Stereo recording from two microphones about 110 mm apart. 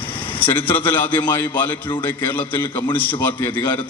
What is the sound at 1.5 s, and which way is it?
Speech, 45° left (ahead or behind).